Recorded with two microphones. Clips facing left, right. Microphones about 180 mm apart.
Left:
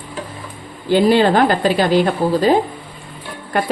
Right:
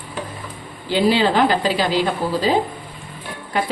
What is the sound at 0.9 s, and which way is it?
A woman's voice, 50° left (ahead or behind).